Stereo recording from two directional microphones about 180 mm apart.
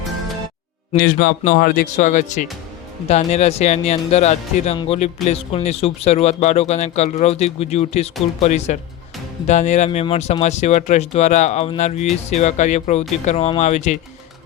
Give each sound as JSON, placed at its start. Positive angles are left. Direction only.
{"t": 0.9, "sound": "a man's voice", "side_deg": 50}